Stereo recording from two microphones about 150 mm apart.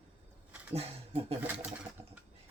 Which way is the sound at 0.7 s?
40° right (ahead or behind).